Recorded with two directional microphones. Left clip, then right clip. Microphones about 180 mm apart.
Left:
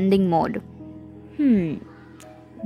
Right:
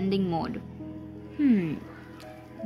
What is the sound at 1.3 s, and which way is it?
Speech, 25° left (ahead or behind).